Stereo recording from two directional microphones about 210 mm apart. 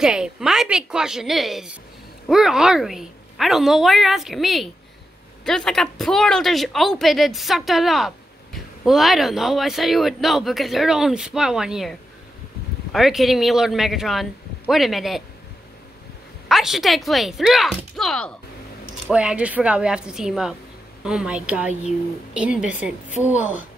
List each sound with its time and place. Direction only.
0.0 s speech: 5° right (ahead or behind)
16.4 s a woman's voice: centre (ahead or behind)